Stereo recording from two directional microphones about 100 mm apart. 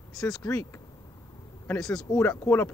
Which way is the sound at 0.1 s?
5° left (ahead or behind).